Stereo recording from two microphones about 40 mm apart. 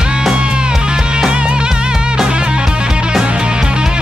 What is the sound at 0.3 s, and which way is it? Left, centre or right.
Music, right.